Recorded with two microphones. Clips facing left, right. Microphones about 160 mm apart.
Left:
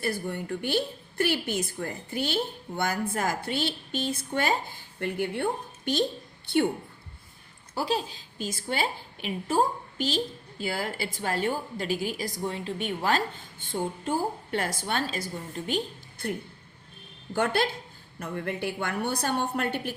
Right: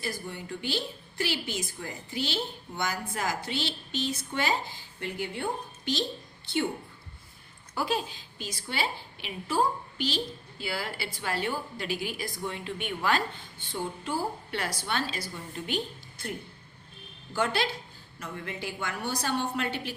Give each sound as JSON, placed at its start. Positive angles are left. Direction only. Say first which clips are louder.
{"t": 0.0, "sound": "a woman's voice", "louder": "left 6 dB", "side_deg": 55}
{"t": 7.8, "sound": "a woman's voice", "louder": "left 2 dB", "side_deg": 35}
{"t": 17.3, "sound": "a woman's voice", "louder": "left 3 dB", "side_deg": 55}